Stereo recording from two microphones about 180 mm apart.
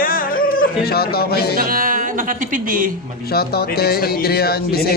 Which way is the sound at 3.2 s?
60° left (ahead or behind).